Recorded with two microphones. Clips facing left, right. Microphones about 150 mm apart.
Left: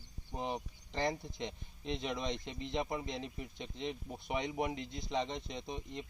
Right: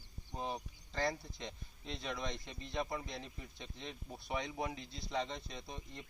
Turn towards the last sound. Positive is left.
turn(degrees=20)  # may be behind; listen again after turning